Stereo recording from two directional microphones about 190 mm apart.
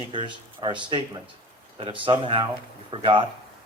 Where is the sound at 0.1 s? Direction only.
25° right (ahead or behind).